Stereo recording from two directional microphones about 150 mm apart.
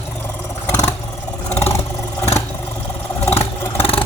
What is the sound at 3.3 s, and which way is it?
Vehicle, 40° left (ahead or behind).